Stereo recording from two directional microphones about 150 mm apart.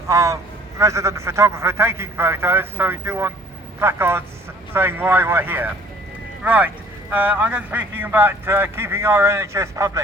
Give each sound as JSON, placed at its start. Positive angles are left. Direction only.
{"t": 0.1, "sound": "a man's voice", "side_deg": -20}